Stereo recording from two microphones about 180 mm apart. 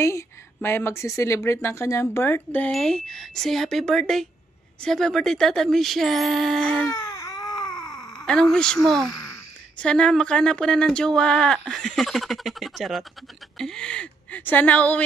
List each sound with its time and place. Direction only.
0.0 s a woman's voice: 15° left (ahead or behind)
6.9 s baby cry: 20° left (ahead or behind)
7.4 s a sound: 5° left (ahead or behind)
9.8 s a woman's voice: 5° left (ahead or behind)